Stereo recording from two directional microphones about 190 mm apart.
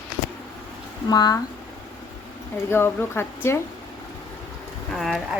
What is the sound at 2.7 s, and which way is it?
Speech, 10° left (ahead or behind).